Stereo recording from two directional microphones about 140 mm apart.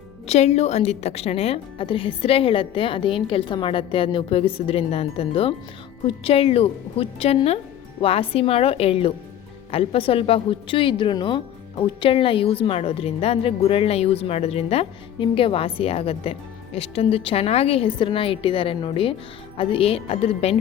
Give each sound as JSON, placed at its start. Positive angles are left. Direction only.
{"t": 0.3, "sound": "a woman's voice", "side_deg": 50}